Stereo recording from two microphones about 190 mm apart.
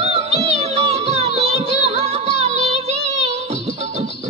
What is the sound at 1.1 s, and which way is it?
Music, 35° right (ahead or behind).